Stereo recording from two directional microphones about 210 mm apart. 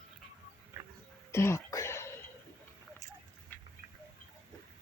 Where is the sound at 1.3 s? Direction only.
10° left (ahead or behind).